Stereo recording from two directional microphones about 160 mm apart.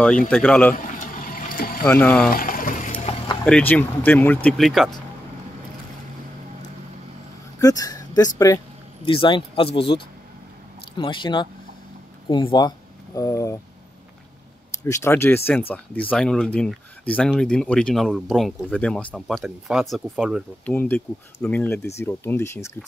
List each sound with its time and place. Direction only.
0.3 s speech: 10° left (ahead or behind)
0.7 s a sound: 55° left (ahead or behind)
1.9 s speech: 10° left (ahead or behind)
2.3 s water: 60° left (ahead or behind)
2.9 s boat: 35° left (ahead or behind)
3.4 s speech: 5° left (ahead or behind)
7.6 s speech: 20° left (ahead or behind)
9.0 s speech: 35° left (ahead or behind)
14.9 s speech: 15° left (ahead or behind); by 20.4 s centre (ahead or behind)
20.6 s speech: 10° left (ahead or behind)